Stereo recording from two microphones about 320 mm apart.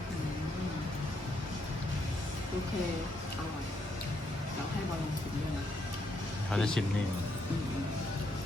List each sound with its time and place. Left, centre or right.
6.5 s speech: centre